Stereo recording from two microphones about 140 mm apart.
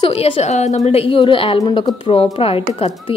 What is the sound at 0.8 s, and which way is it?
Speech, 40° left (ahead or behind).